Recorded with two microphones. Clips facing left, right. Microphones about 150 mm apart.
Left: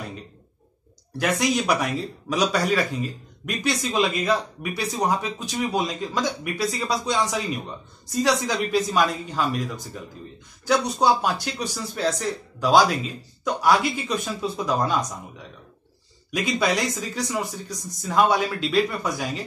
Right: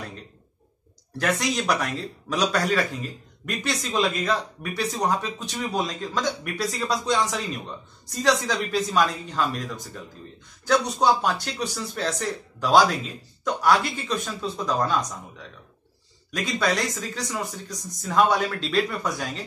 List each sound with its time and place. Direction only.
1.2 s speech: 5° left (ahead or behind)
16.3 s speech: 10° left (ahead or behind)